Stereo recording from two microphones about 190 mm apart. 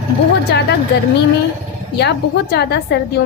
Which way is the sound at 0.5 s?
65° left (ahead or behind).